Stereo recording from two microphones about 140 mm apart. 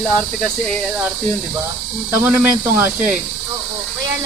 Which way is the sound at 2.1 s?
15° right (ahead or behind).